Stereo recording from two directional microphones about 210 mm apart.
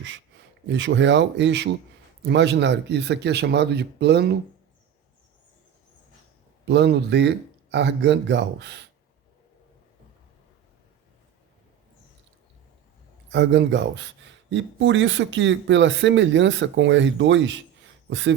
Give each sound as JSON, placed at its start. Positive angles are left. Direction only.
{"t": 0.7, "sound": "speech", "side_deg": -60}
{"t": 6.7, "sound": "speech", "side_deg": -50}
{"t": 13.3, "sound": "speech", "side_deg": -55}